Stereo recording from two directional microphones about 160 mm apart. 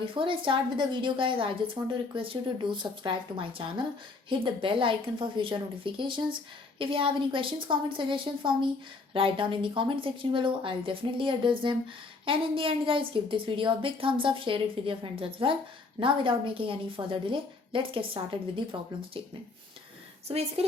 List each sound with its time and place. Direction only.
0.0 s a woman's voice: 30° right (ahead or behind)
20.2 s a woman's voice: 40° right (ahead or behind)